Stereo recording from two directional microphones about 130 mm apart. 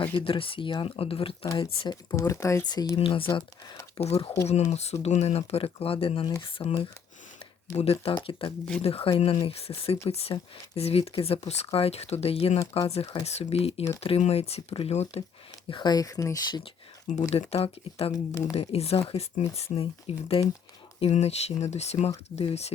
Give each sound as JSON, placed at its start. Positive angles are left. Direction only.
{"t": 0.0, "sound": "speech", "side_deg": 40}
{"t": 2.1, "sound": "speech", "side_deg": 25}
{"t": 4.0, "sound": "speech", "side_deg": 55}
{"t": 7.8, "sound": "speech", "side_deg": 50}
{"t": 15.7, "sound": "speech", "side_deg": 35}
{"t": 17.2, "sound": "speech", "side_deg": 60}